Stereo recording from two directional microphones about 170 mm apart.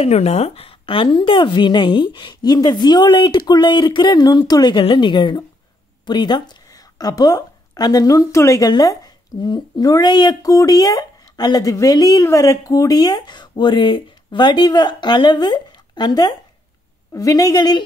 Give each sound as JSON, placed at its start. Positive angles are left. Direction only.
{"t": 0.0, "sound": "a woman's voice", "side_deg": 40}